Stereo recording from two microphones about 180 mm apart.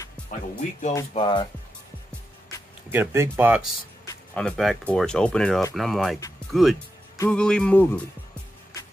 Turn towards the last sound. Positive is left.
turn(degrees=10)  # may be behind; listen again after turning